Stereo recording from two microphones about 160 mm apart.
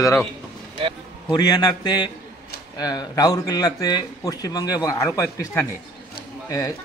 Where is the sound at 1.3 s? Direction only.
25° left (ahead or behind).